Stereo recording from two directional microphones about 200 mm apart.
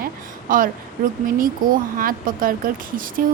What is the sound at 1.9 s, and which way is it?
A woman's voice, 45° right (ahead or behind).